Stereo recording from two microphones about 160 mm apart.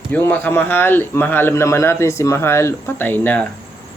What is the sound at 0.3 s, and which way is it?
Speech, 10° left (ahead or behind).